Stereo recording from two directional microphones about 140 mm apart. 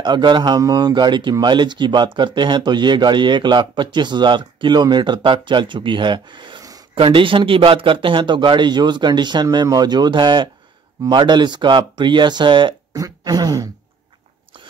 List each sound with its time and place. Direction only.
0.0 s speech: 35° right (ahead or behind)